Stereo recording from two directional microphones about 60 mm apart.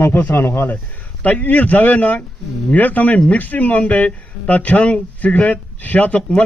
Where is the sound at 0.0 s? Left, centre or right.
Left.